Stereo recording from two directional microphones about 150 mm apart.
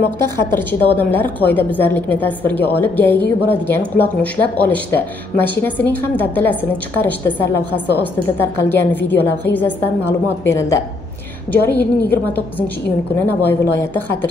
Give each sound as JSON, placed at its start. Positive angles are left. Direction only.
{"t": 0.6, "sound": "a woman's voice", "side_deg": 15}